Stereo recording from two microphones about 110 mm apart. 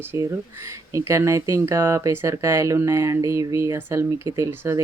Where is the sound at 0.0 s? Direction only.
25° right (ahead or behind).